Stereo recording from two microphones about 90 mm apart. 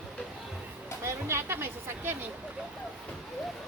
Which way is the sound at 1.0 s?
30° right (ahead or behind).